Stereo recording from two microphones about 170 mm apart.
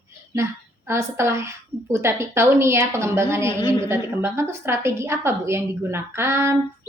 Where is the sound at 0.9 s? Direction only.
15° right (ahead or behind).